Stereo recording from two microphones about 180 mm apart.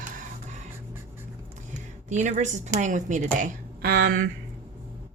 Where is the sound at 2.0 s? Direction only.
40° right (ahead or behind); by 4.1 s 60° right (ahead or behind).